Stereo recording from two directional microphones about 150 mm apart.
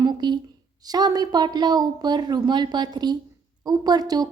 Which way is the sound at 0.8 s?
25° right (ahead or behind).